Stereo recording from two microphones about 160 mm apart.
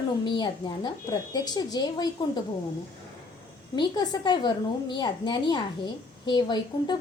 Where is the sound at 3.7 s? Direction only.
30° left (ahead or behind).